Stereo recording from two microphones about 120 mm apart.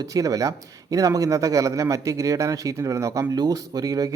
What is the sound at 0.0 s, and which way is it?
A man's voice, 30° right (ahead or behind).